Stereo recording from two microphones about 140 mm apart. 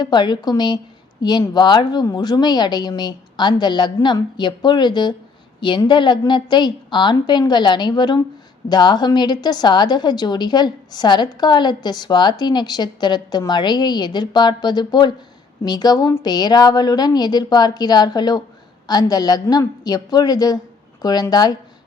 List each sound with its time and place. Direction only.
0.0 s a woman's voice: 30° left (ahead or behind)